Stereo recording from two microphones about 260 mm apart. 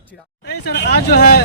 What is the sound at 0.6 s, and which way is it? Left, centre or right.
Speech, left.